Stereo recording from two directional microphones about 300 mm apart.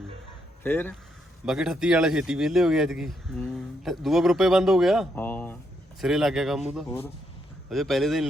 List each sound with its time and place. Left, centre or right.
0.6 s speech: centre